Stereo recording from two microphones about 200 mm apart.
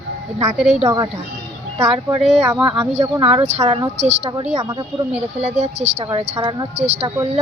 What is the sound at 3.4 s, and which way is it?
Speech, 35° right (ahead or behind).